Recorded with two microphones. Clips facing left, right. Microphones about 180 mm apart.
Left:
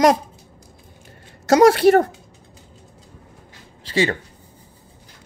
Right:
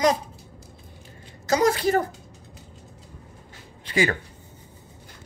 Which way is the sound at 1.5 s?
80° left.